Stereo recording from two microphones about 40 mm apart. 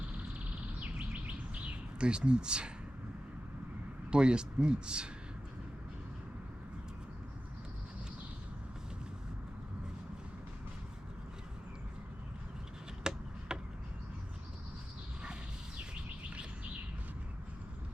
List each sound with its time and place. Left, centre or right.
0.8 s bird: right
1.6 s speech: right
4.1 s speech: right
13.0 s a sound: centre